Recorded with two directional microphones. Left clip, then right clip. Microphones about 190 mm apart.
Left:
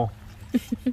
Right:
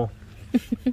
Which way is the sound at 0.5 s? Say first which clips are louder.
Right 2 dB; 10° right (ahead or behind).